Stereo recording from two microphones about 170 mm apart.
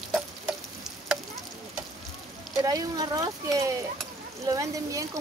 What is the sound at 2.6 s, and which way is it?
Speech, 20° right (ahead or behind).